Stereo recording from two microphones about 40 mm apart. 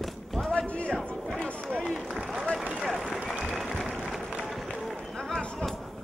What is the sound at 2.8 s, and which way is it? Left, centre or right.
Run, centre.